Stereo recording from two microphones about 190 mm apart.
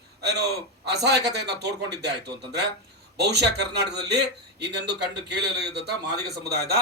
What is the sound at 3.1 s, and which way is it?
A man's voice, 60° right (ahead or behind).